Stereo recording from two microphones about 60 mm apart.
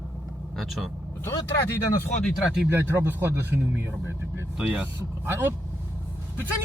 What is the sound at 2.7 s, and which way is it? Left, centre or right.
Speech, right.